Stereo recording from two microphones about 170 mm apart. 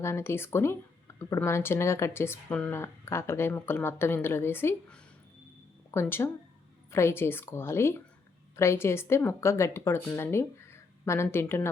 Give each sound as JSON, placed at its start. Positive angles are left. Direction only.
{"t": 0.0, "sound": "speech", "side_deg": 15}